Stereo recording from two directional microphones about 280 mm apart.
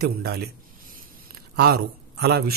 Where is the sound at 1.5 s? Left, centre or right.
Right.